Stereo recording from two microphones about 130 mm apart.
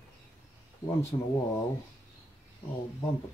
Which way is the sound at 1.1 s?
35° left (ahead or behind).